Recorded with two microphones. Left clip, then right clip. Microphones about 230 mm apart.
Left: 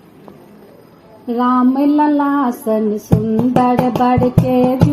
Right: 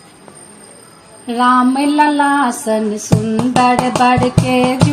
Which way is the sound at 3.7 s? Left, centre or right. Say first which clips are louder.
Right 2 dB; centre.